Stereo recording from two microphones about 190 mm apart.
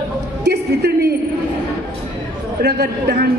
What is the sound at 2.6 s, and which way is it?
Speech, 60° right (ahead or behind).